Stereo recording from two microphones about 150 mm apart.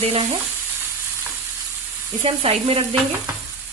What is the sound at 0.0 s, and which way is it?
Speech, 40° right (ahead or behind).